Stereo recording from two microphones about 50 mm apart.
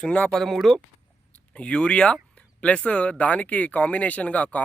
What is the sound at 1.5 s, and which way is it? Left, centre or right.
Speech, left.